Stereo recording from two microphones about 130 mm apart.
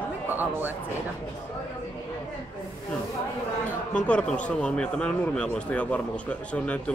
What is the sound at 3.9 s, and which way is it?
A man's voice, 10° left (ahead or behind).